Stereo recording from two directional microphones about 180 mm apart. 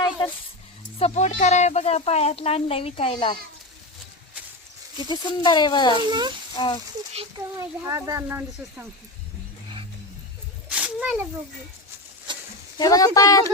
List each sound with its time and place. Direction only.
0.9 s speech: 35° left (ahead or behind)
5.0 s speech: 25° left (ahead or behind)
6.0 s speech: 25° right (ahead or behind)
7.6 s speech: 15° right (ahead or behind)
10.7 s a sound: 5° right (ahead or behind)
12.7 s speech: 20° left (ahead or behind)